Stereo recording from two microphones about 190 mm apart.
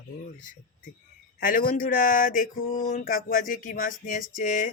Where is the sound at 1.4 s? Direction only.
45° left (ahead or behind).